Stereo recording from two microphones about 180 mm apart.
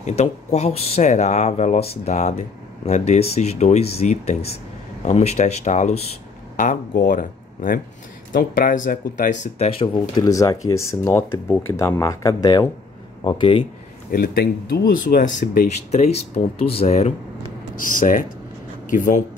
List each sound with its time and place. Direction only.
0.0 s speech: 40° left (ahead or behind)
14.1 s speech: 60° left (ahead or behind)
15.9 s speech: 35° left (ahead or behind)
17.7 s speech: 50° left (ahead or behind)